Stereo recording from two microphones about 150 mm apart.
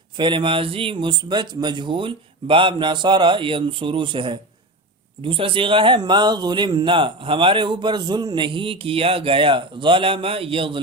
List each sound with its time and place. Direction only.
0.2 s speech: 35° right (ahead or behind)